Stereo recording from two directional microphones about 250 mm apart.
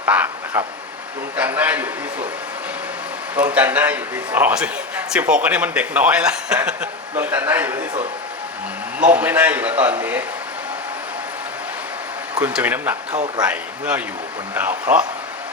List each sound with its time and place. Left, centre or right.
0.0 s a man's voice: centre
3.3 s a man's voice: centre
9.0 s a man's voice: centre
12.4 s a man's voice: centre
13.1 s a man's voice: right
13.4 s a man's voice: centre